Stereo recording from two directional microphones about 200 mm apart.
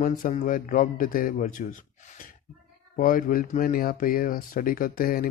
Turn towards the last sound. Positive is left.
turn(degrees=45)  # may be behind; listen again after turning